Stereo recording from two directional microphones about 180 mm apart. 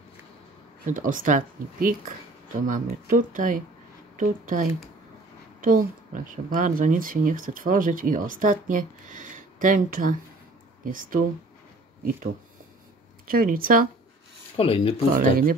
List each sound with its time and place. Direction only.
0.8 s speech: 50° right (ahead or behind)
13.3 s speech: 55° right (ahead or behind)
14.6 s speech: 30° left (ahead or behind)
15.1 s speech: 55° right (ahead or behind)